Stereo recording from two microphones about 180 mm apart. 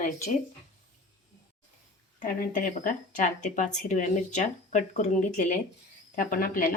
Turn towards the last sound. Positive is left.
turn(degrees=50)  # may be behind; listen again after turning